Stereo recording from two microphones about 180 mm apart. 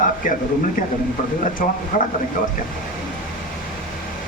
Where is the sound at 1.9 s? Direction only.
50° left (ahead or behind).